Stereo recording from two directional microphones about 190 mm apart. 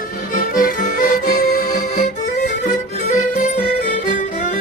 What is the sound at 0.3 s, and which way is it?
Music, 45° left (ahead or behind).